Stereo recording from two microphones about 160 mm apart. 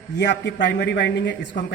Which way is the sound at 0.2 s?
90° left.